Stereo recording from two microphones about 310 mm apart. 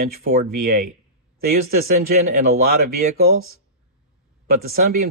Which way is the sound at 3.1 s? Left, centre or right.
Right.